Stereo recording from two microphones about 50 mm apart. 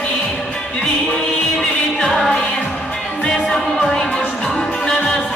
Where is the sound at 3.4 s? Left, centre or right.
Centre.